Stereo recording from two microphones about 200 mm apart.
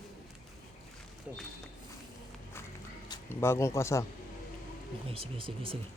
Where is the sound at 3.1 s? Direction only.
10° left (ahead or behind).